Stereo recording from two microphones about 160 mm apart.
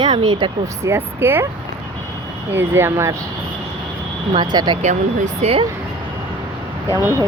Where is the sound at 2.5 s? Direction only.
15° right (ahead or behind).